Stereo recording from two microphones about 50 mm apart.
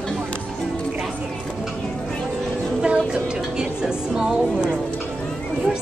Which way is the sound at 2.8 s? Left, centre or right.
Right.